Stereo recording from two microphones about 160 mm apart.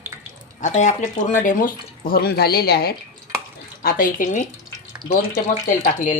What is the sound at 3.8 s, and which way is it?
Speech, 65° left (ahead or behind).